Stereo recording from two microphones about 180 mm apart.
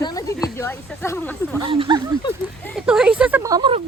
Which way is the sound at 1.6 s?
30° right (ahead or behind).